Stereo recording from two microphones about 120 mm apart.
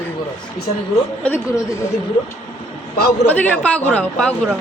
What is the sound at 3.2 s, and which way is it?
Speech, 10° left (ahead or behind).